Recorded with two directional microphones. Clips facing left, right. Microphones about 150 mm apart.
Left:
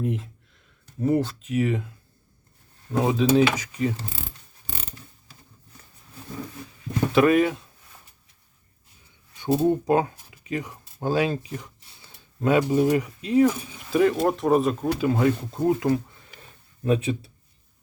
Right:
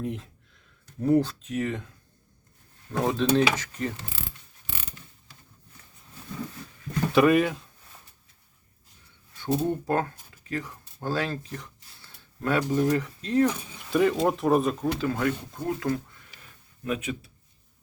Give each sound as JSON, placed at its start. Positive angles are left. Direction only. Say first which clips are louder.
{"t": 0.0, "sound": "speech", "louder": "left 4 dB", "side_deg": 0}
{"t": 2.9, "sound": "speech", "louder": "left 3 dB", "side_deg": 5}
{"t": 3.5, "sound": "mechanisms", "louder": "left 5 dB", "side_deg": 10}
{"t": 7.1, "sound": "speech", "louder": "left 1 dB", "side_deg": 0}
{"t": 9.3, "sound": "speech", "louder": "left 5 dB", "side_deg": 15}
{"t": 14.9, "sound": "speech", "louder": "left 5 dB", "side_deg": 20}